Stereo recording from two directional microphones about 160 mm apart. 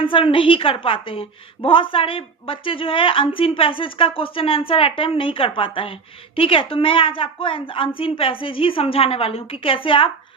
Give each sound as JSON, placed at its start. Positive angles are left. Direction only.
{"t": 0.0, "sound": "a woman's voice", "side_deg": 35}